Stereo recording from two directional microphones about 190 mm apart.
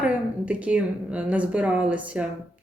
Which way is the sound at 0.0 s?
5° right (ahead or behind).